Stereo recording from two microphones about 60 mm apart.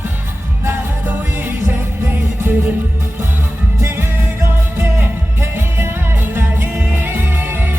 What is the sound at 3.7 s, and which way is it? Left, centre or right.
Music, right.